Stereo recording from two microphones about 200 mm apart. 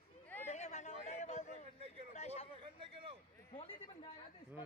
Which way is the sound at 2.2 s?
30° left (ahead or behind).